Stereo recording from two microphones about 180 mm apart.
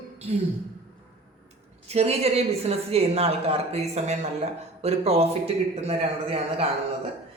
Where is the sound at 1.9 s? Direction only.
35° right (ahead or behind).